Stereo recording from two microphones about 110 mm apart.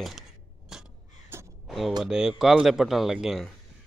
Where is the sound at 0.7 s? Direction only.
5° right (ahead or behind).